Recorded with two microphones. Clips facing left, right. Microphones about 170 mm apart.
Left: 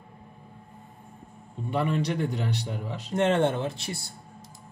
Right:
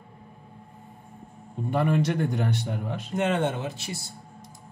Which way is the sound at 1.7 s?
50° right (ahead or behind).